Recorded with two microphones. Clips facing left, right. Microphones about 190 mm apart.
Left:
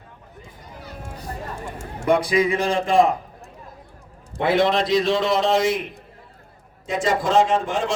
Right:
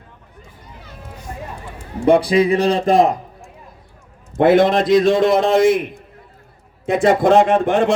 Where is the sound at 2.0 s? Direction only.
30° right (ahead or behind).